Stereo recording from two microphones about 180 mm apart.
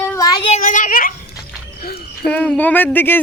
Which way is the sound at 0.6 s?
45° left (ahead or behind).